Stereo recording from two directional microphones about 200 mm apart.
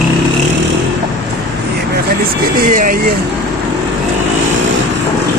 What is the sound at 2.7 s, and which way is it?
Speech, 40° right (ahead or behind).